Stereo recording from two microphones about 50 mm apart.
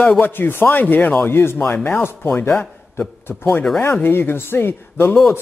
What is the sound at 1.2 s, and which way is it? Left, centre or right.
Speech, left.